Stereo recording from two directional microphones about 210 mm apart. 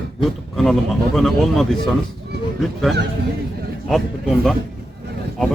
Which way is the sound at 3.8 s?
Centre (ahead or behind).